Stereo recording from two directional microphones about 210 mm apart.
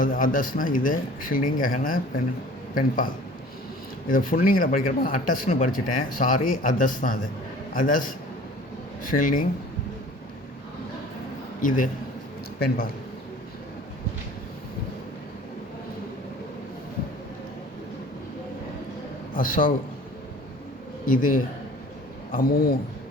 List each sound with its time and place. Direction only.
0.0 s speech: 40° left (ahead or behind)
4.1 s speech: 40° left (ahead or behind)
12.5 s speech: 45° left (ahead or behind)
19.3 s a man's voice: 40° left (ahead or behind)
21.1 s speech: 40° left (ahead or behind)